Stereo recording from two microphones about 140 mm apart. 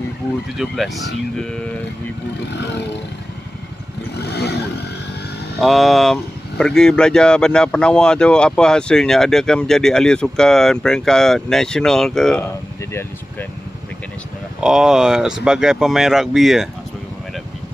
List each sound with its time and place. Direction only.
0.6 s speech: centre (ahead or behind)
5.6 s speech: centre (ahead or behind)
14.6 s speech: 5° right (ahead or behind)